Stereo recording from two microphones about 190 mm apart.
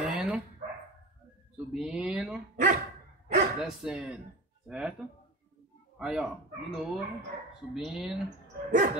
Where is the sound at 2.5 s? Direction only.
45° right (ahead or behind).